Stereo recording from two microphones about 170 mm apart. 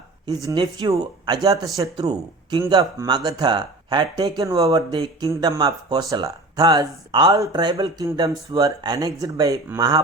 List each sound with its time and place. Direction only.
0.4 s speech: 25° right (ahead or behind)